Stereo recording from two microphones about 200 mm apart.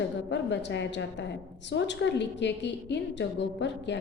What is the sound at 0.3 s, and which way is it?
A woman's voice, 60° left (ahead or behind).